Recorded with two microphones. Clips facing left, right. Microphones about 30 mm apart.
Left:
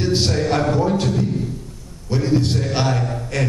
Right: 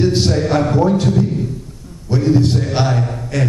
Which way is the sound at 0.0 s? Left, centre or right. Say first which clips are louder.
Right 4 dB; centre.